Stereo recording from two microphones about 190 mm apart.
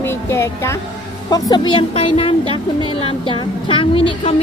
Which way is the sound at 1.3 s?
20° left (ahead or behind).